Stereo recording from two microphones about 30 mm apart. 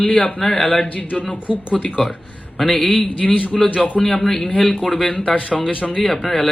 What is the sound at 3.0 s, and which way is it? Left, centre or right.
Speech, left.